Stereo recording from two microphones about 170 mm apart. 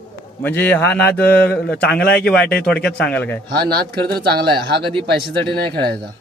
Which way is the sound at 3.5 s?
65° right (ahead or behind).